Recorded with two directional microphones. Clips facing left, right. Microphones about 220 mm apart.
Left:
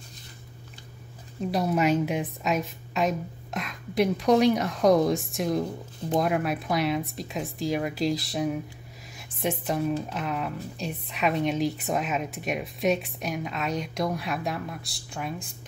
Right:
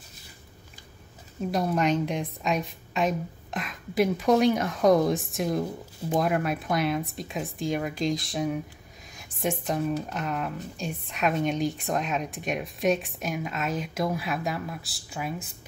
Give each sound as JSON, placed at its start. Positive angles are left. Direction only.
{"t": 1.4, "sound": "a woman's voice", "side_deg": 0}